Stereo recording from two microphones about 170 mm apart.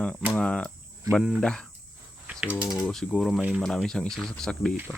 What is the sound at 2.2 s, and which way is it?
Typing, 5° right (ahead or behind).